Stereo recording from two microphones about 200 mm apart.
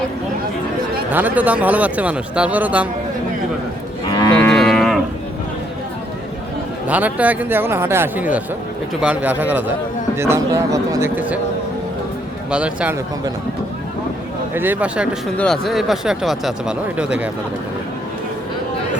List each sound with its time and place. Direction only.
1.1 s speech: 10° right (ahead or behind)
4.1 s cattle: 20° left (ahead or behind)
4.4 s cattle: centre (ahead or behind)
6.8 s speech: 5° right (ahead or behind)
12.5 s speech: 5° right (ahead or behind)
14.5 s speech: 10° right (ahead or behind)